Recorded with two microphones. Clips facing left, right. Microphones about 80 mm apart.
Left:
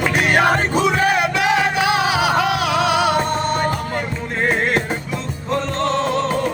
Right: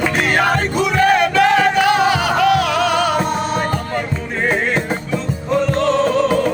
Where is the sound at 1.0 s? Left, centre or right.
Centre.